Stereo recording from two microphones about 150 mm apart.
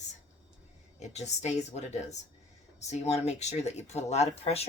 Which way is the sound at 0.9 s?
50° left (ahead or behind).